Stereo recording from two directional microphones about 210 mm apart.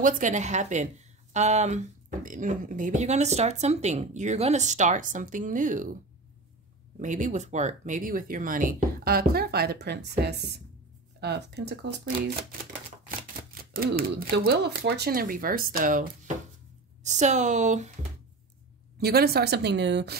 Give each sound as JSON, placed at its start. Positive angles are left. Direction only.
{"t": 0.0, "sound": "speech", "side_deg": -35}
{"t": 7.0, "sound": "speech", "side_deg": -35}
{"t": 13.7, "sound": "speech", "side_deg": -45}
{"t": 18.9, "sound": "speech", "side_deg": -50}